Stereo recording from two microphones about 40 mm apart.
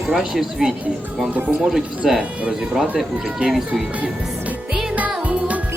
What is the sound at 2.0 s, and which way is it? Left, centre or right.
Speech, centre.